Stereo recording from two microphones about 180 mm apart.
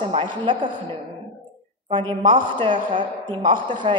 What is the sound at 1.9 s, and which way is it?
A man's voice, 25° right (ahead or behind).